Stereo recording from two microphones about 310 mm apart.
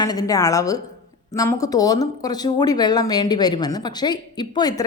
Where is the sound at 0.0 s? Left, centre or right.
Centre.